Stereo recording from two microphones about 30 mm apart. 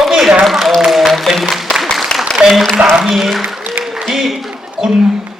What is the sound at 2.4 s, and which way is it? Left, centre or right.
Applause, right.